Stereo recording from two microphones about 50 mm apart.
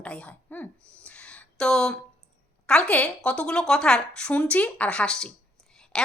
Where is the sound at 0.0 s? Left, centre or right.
Left.